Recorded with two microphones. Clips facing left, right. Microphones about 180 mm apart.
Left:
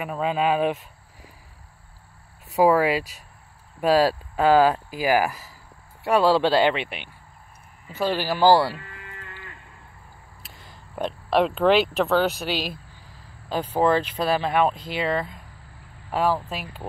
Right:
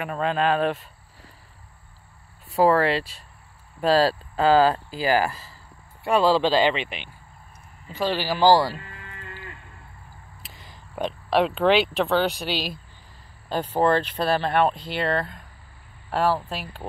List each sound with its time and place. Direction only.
0.0 s speech: 5° left (ahead or behind)
2.5 s speech: 10° left (ahead or behind)
6.8 s speech: 55° left (ahead or behind)
7.9 s speech: 5° left (ahead or behind)
10.4 s speech: centre (ahead or behind)